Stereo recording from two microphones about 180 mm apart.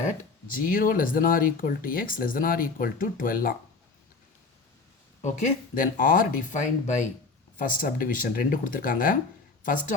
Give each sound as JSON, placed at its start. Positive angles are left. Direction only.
{"t": 0.0, "sound": "speech", "side_deg": 50}
{"t": 5.2, "sound": "speech", "side_deg": 40}